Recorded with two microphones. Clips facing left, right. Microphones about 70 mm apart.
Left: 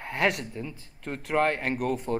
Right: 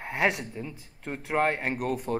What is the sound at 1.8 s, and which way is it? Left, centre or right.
Speech, right.